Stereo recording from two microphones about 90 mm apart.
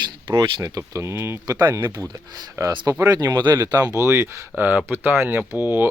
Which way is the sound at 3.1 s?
40° right (ahead or behind).